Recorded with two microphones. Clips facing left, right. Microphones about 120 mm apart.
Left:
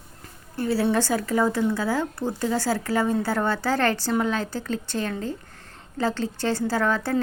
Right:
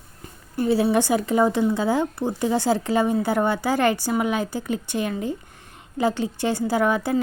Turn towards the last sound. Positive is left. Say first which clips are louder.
# right 3 dB
turn(degrees=-15)  # may be behind; listen again after turning